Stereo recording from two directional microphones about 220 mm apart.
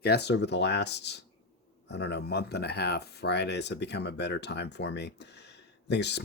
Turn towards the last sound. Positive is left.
turn(degrees=50)  # may be behind; listen again after turning